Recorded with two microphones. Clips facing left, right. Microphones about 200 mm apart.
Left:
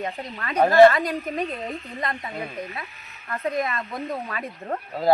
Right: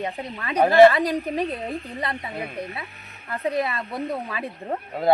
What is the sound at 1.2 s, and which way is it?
Speech, 35° right (ahead or behind).